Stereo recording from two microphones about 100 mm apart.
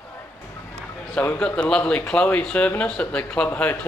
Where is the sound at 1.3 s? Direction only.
10° left (ahead or behind).